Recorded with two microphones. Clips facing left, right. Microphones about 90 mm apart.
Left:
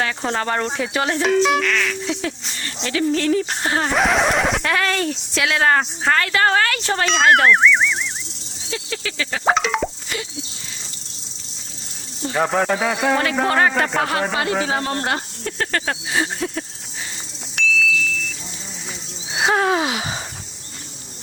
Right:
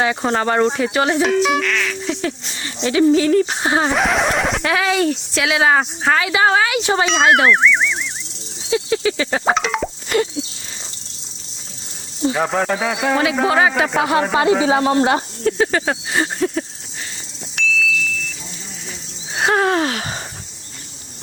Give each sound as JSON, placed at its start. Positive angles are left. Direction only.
{"t": 0.0, "sound": "speech", "side_deg": -15}
{"t": 0.3, "sound": "speech", "side_deg": -5}
{"t": 2.6, "sound": "speech", "side_deg": -15}
{"t": 3.2, "sound": "speech", "side_deg": -5}
{"t": 3.6, "sound": "speech", "side_deg": -15}
{"t": 3.9, "sound": "speech", "side_deg": 0}
{"t": 8.7, "sound": "a sound", "side_deg": -20}
{"t": 9.4, "sound": "speech", "side_deg": 0}
{"t": 10.1, "sound": "plop", "side_deg": -50}
{"t": 12.3, "sound": "speech", "side_deg": 0}
{"t": 17.5, "sound": "a sound", "side_deg": 0}
{"t": 19.3, "sound": "speech", "side_deg": 0}